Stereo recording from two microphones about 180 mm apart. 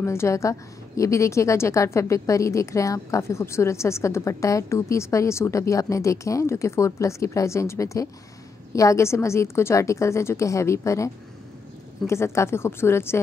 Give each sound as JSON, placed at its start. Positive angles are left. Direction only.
{"t": 0.0, "sound": "a woman's voice", "side_deg": 15}
{"t": 12.1, "sound": "a woman's voice", "side_deg": 15}